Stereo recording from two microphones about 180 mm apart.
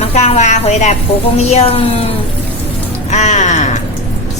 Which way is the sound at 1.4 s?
35° left (ahead or behind).